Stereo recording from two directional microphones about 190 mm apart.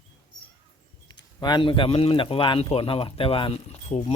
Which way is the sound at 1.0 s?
20° left (ahead or behind).